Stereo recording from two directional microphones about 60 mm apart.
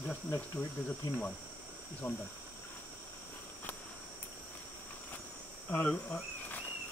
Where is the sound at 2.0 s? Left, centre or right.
Left.